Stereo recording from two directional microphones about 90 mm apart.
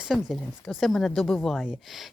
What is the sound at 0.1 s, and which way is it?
Speech, 5° left (ahead or behind).